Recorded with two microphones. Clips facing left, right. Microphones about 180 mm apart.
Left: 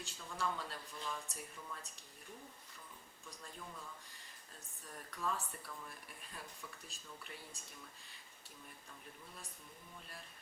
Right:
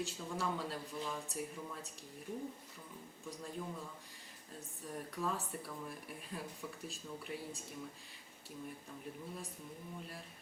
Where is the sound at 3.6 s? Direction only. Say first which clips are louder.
Right 6 dB; 25° right (ahead or behind).